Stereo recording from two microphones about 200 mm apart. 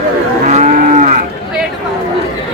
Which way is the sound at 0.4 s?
40° right (ahead or behind).